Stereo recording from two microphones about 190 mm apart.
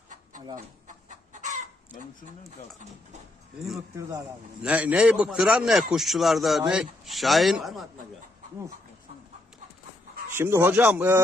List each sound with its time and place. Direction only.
1.0 s chicken: 40° right (ahead or behind)
4.6 s a man's voice: 5° right (ahead or behind)
10.3 s speech: 10° right (ahead or behind)